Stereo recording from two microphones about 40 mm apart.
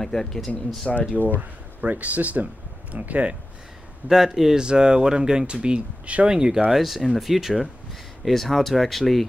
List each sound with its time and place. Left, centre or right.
0.0 s speech: centre
1.2 s speech: right
1.8 s speech: right
4.1 s speech: centre
4.6 s speech: right
6.2 s speech: centre
6.7 s speech: centre